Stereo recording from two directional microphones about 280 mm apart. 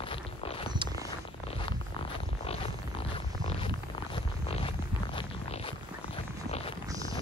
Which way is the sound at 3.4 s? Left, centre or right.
Centre.